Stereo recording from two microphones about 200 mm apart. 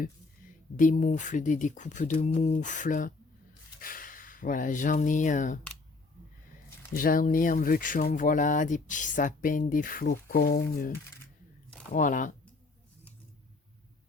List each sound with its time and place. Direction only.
0.8 s speech: 40° left (ahead or behind)
6.9 s speech: 45° left (ahead or behind)
11.9 s speech: 40° left (ahead or behind)